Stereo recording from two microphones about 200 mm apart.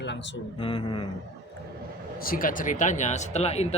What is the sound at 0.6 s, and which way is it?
Speech, 25° left (ahead or behind).